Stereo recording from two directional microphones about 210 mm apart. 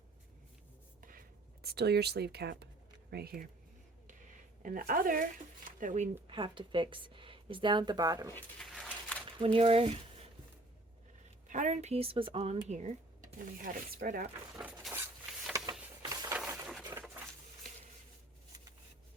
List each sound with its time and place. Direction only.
1.0 s speech: 40° right (ahead or behind)
6.2 s a woman's voice: 20° right (ahead or behind)
8.3 s dog: 5° left (ahead or behind)
9.2 s speech: 25° right (ahead or behind)
11.4 s speech: 35° right (ahead or behind)
14.5 s a sound: 5° right (ahead or behind)
16.6 s patter: centre (ahead or behind)